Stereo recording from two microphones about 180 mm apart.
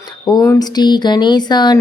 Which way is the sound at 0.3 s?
20° left (ahead or behind).